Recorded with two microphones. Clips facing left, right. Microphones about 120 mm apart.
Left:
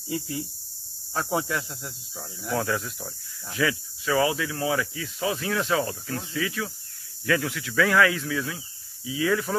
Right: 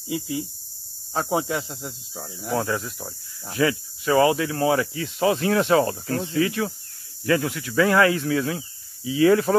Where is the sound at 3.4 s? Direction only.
35° right (ahead or behind).